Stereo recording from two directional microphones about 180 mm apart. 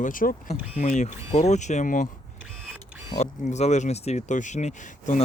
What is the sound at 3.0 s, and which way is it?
Speech, 40° left (ahead or behind).